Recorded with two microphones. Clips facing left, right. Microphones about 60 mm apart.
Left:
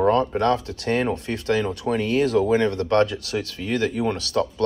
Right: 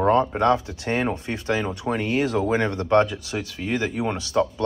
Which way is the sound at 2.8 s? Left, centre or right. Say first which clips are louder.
Right 1 dB; centre.